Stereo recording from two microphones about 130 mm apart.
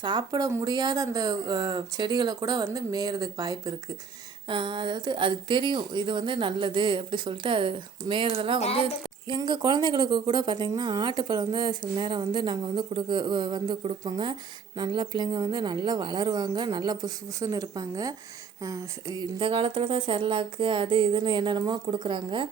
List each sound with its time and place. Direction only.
0.0 s speech: 35° right (ahead or behind)
4.4 s a woman's voice: 40° right (ahead or behind)
8.5 s a woman's voice: 55° left (ahead or behind)
9.3 s a woman's voice: 35° right (ahead or behind)